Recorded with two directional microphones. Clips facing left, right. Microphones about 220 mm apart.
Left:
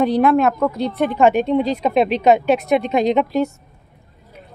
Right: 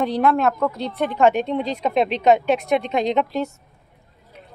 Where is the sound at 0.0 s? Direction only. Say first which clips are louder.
Left 4 dB; 10° left (ahead or behind).